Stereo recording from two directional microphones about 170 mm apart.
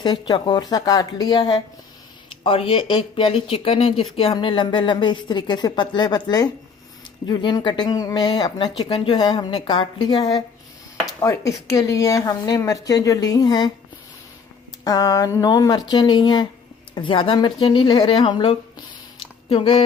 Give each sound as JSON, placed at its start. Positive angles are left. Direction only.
{"t": 0.0, "sound": "a woman's voice", "side_deg": 25}
{"t": 14.8, "sound": "a woman's voice", "side_deg": 20}